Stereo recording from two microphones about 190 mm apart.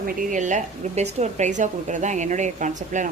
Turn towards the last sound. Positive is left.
turn(degrees=-40)  # may be behind; listen again after turning